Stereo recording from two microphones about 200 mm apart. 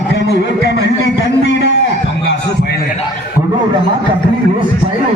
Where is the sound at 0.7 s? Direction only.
60° left (ahead or behind).